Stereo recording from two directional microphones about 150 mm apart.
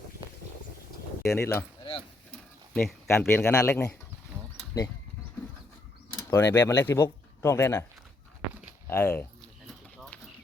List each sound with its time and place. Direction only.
1.2 s speech: 5° left (ahead or behind)
1.8 s keys jangling: 35° left (ahead or behind)
3.1 s a man's voice: 15° left (ahead or behind)
4.7 s speech: 20° left (ahead or behind)
6.1 s a man's voice: 15° left (ahead or behind)
8.9 s a man's voice: 15° left (ahead or behind)